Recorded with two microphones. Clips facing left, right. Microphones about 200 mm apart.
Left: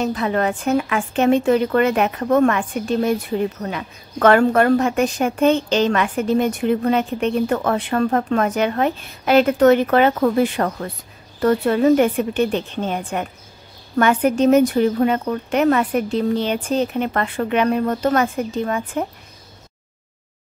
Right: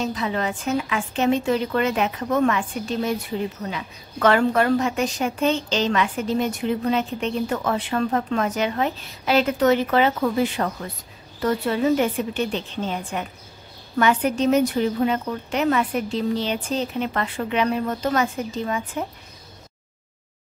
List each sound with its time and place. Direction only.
0.0 s a woman's voice: 55° left (ahead or behind)